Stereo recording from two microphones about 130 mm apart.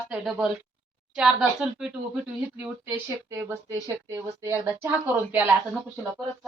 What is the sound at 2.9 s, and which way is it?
A woman's voice, 20° right (ahead or behind).